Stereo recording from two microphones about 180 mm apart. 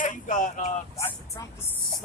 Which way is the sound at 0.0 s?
45° left (ahead or behind).